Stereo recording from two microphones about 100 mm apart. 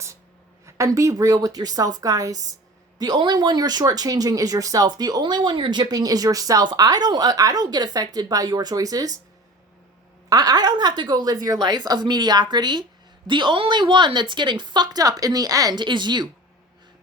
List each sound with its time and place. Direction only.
0.6 s speech: 30° right (ahead or behind)
10.2 s a woman's voice: 40° right (ahead or behind)